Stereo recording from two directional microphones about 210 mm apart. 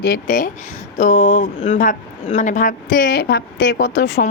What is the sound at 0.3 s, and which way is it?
A woman's voice, 40° left (ahead or behind).